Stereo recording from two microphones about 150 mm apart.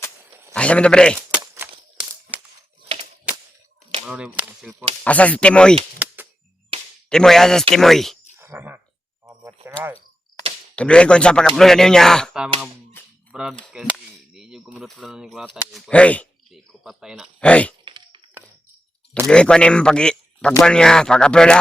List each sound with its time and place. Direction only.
0.5 s speech: 5° left (ahead or behind)
2.8 s typewriter: 45° right (ahead or behind)
4.0 s whip: 5° right (ahead or behind)
5.0 s speech: 10° left (ahead or behind)
7.1 s a man's voice: 5° left (ahead or behind)
8.4 s a sound: 15° right (ahead or behind)
10.8 s a man's voice: 5° left (ahead or behind)
15.7 s a man's voice: 10° left (ahead or behind)
17.4 s speech: 10° left (ahead or behind)
17.8 s a sound: 35° right (ahead or behind)
19.3 s a man's voice: 5° left (ahead or behind)